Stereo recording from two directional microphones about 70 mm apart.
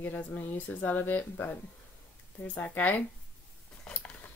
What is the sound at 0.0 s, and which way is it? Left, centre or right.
Speech, left.